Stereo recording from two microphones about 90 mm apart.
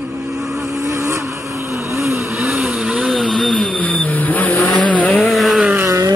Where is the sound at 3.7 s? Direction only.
15° left (ahead or behind).